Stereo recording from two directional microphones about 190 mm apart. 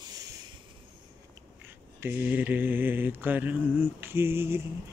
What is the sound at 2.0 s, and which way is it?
Mantra, 10° right (ahead or behind).